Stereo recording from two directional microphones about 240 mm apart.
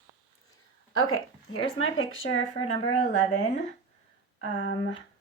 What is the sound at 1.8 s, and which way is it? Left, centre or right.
Speech, left.